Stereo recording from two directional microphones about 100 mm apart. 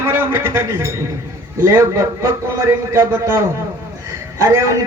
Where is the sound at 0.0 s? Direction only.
25° right (ahead or behind).